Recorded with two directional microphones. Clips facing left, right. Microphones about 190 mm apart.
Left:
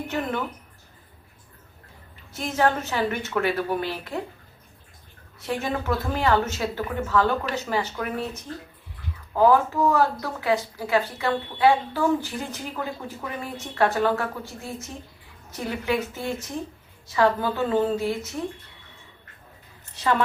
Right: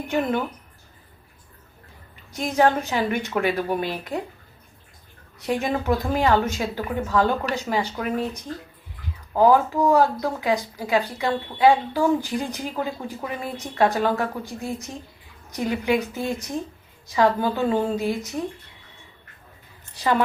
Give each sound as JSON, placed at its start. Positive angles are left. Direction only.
{"t": 0.1, "sound": "speech", "side_deg": -15}
{"t": 2.3, "sound": "speech", "side_deg": -15}
{"t": 5.4, "sound": "speech", "side_deg": -15}
{"t": 20.0, "sound": "speech", "side_deg": -15}